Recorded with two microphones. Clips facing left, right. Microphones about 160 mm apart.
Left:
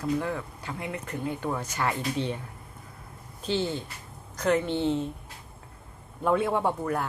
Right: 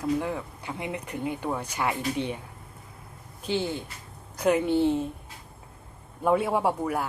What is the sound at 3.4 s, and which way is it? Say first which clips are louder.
Speech: even; 15° right (ahead or behind).